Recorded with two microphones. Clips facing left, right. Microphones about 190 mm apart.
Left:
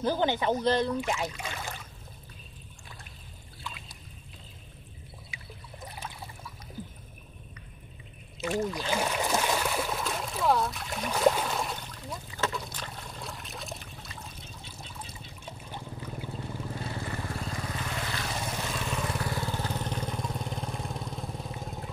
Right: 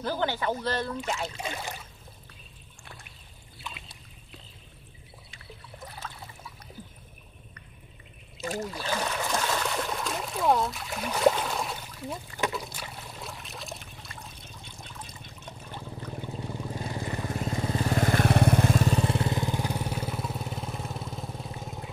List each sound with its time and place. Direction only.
0.0 s speech: 15° left (ahead or behind)
1.3 s speech: 20° right (ahead or behind)
5.9 s trickle: 15° left (ahead or behind)
8.5 s a sound: 15° left (ahead or behind); by 12.0 s 5° right (ahead or behind)
12.5 s trickle: 5° right (ahead or behind)
16.3 s vehicle: 15° right (ahead or behind); by 17.9 s 30° right (ahead or behind)
17.9 s vehicle: 50° right (ahead or behind)
18.8 s vehicle: 35° right (ahead or behind); by 21.9 s centre (ahead or behind)